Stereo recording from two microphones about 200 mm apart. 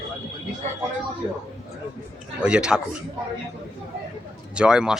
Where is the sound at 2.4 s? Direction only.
5° right (ahead or behind).